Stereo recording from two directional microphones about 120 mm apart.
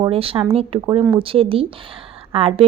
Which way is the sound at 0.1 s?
50° right (ahead or behind).